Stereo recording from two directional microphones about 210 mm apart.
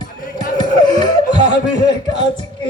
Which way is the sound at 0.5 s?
20° left (ahead or behind).